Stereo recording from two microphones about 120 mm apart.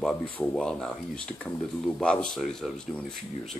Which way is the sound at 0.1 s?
10° left (ahead or behind).